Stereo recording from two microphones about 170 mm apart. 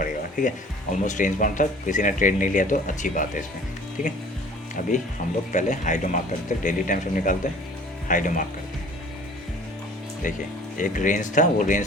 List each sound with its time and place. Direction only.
0.0 s speech: 50° left (ahead or behind)
10.2 s speech: 50° left (ahead or behind)